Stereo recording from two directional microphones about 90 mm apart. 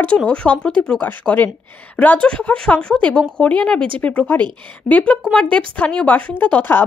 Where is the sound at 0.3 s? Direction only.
10° left (ahead or behind).